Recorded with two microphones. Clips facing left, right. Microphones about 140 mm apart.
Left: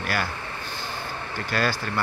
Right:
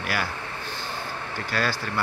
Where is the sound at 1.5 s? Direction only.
Centre (ahead or behind).